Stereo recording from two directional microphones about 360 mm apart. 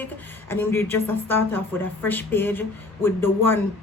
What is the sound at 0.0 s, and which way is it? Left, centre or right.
Speech, centre.